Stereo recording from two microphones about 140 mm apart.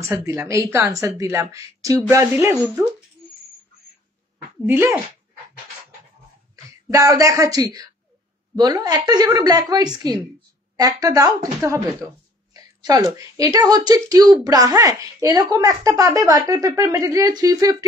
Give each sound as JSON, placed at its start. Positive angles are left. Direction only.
{"t": 0.0, "sound": "speech", "side_deg": -20}
{"t": 4.6, "sound": "speech", "side_deg": -15}
{"t": 6.5, "sound": "speech", "side_deg": -25}